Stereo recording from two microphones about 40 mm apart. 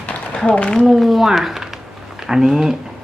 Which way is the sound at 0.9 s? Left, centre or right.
Centre.